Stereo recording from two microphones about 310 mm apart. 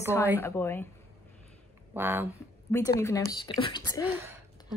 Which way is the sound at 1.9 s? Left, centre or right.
Centre.